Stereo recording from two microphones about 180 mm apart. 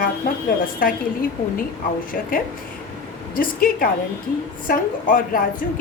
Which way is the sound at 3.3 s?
50° left (ahead or behind).